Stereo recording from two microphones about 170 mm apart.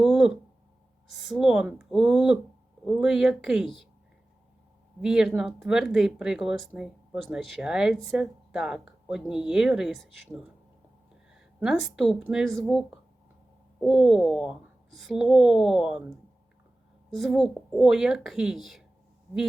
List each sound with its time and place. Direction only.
0.0 s a sound: 5° right (ahead or behind)
1.0 s speech: centre (ahead or behind)
5.0 s speech: 5° right (ahead or behind)
11.3 s speech: centre (ahead or behind)